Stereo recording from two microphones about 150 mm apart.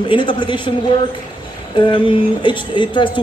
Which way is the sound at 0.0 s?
35° left (ahead or behind).